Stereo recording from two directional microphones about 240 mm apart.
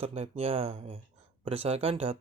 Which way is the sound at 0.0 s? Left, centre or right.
Right.